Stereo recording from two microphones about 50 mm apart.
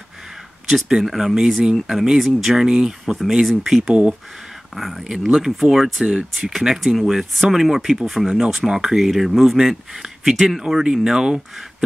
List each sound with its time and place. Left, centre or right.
0.7 s speech: centre
6.0 s speech: centre